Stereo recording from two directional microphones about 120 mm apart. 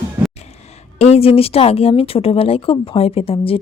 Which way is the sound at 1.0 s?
60° left (ahead or behind).